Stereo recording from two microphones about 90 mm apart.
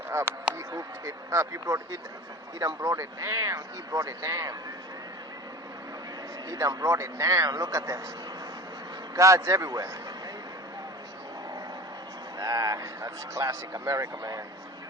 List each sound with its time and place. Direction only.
0.1 s speech: 30° right (ahead or behind)
6.5 s speech: 40° right (ahead or behind)
9.1 s speech: 35° right (ahead or behind)
12.4 s speech: 40° right (ahead or behind)